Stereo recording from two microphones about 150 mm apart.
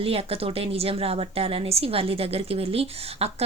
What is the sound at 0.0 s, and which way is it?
A woman's voice, 40° right (ahead or behind).